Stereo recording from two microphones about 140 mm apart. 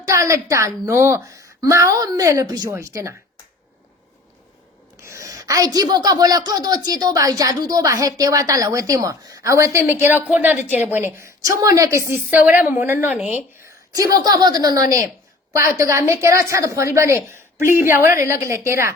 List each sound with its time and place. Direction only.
0.0 s a woman's voice: 20° right (ahead or behind)
5.0 s a woman's voice: 20° right (ahead or behind)
13.9 s a woman's voice: 25° right (ahead or behind)